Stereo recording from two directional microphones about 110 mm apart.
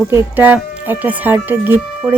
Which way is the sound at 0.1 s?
15° right (ahead or behind).